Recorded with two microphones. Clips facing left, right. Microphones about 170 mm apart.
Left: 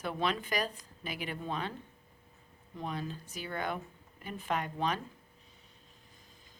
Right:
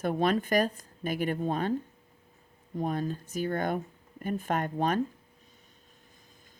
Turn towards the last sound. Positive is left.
turn(degrees=-50)  # may be behind; listen again after turning